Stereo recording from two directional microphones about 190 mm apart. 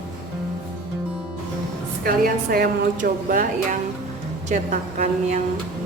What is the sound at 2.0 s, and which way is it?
A woman's voice, 50° right (ahead or behind).